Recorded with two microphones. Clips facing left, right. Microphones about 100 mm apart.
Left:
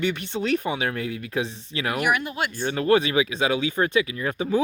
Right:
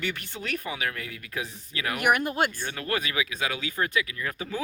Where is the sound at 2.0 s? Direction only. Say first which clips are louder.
Right 2 dB; 50° right (ahead or behind).